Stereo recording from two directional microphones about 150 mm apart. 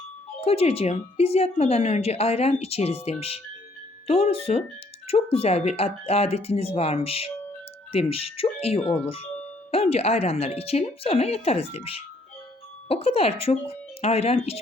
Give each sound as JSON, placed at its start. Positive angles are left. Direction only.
{"t": 0.4, "sound": "speech", "side_deg": 40}